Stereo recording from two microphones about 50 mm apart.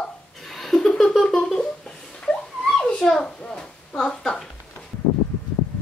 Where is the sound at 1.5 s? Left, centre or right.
Centre.